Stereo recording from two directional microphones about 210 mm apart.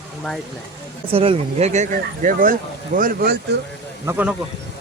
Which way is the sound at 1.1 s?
25° right (ahead or behind).